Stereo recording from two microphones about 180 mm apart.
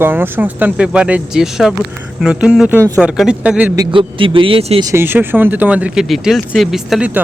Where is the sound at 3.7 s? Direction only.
25° right (ahead or behind).